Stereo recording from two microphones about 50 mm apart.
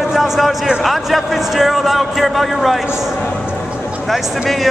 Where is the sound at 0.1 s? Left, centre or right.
Centre.